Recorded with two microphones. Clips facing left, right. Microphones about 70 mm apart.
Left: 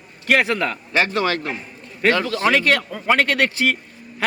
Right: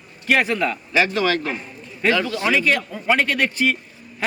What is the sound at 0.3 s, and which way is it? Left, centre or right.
A man's voice, left.